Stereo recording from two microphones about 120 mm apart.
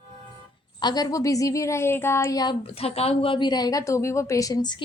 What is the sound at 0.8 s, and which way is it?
A child's voice, 35° left (ahead or behind).